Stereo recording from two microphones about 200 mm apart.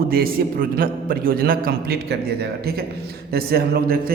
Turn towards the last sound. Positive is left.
turn(degrees=-50)  # may be behind; listen again after turning